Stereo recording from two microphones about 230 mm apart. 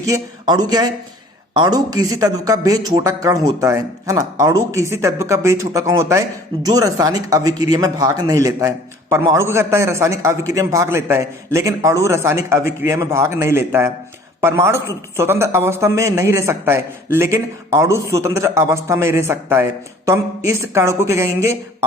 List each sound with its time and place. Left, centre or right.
0.0 s speech: centre